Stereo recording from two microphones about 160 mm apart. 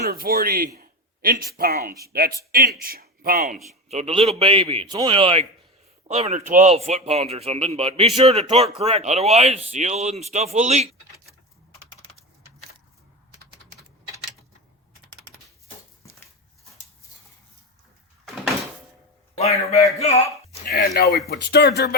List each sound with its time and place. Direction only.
0.0 s speech: 70° right (ahead or behind)
0.8 s a sound: 65° right (ahead or behind)
1.5 s a man's voice: 65° right (ahead or behind)
3.8 s a man's voice: 40° right (ahead or behind)
19.7 s speech: 40° left (ahead or behind)
20.7 s speech: 75° left (ahead or behind)
21.2 s speech: 90° left